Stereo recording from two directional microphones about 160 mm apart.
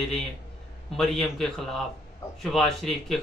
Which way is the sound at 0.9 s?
5° left (ahead or behind).